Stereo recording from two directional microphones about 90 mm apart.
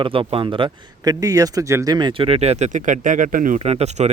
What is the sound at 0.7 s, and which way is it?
Speech, 45° right (ahead or behind).